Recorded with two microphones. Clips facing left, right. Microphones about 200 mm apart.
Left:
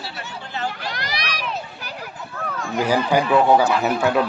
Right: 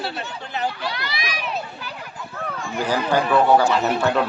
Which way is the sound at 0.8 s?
45° left (ahead or behind).